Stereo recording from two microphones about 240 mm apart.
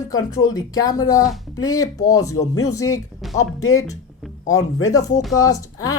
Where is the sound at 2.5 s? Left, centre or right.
Left.